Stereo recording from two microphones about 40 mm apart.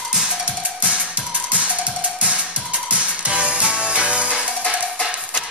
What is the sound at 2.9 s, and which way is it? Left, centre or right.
Music, right.